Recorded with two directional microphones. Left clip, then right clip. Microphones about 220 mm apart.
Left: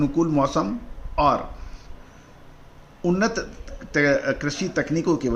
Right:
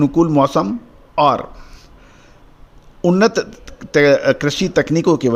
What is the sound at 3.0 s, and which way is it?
Speech, 45° right (ahead or behind).